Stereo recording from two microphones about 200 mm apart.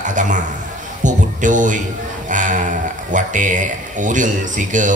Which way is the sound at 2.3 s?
40° right (ahead or behind).